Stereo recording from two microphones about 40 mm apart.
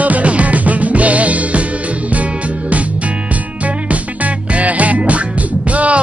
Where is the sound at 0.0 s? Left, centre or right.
Right.